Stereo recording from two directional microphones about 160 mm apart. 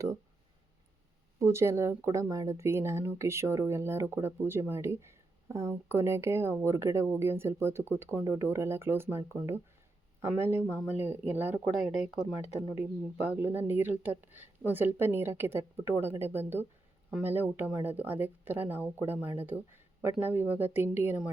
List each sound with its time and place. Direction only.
1.4 s speech: 15° right (ahead or behind)
11.8 s speech: centre (ahead or behind)
13.3 s speech: 10° right (ahead or behind)